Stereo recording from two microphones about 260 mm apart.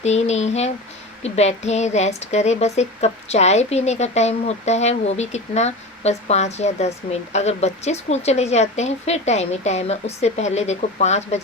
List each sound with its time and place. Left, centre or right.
0.0 s a woman's voice: left